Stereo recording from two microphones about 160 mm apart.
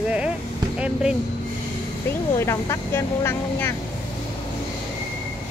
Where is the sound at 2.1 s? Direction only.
15° left (ahead or behind).